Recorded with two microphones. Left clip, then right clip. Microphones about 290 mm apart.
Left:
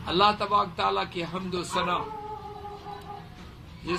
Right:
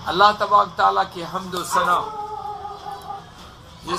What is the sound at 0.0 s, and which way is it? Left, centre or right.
A man's voice, centre.